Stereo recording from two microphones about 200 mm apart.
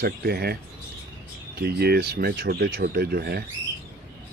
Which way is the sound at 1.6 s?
50° right (ahead or behind).